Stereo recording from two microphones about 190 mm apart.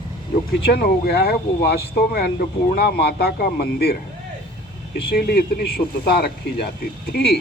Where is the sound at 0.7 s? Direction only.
55° left (ahead or behind).